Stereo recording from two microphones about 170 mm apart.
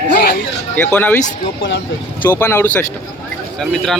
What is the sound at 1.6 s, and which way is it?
Speech, 90° left.